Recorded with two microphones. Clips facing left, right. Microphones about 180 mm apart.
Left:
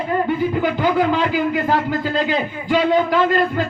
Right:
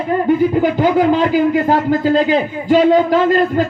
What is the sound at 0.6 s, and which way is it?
Speech, 45° right (ahead or behind).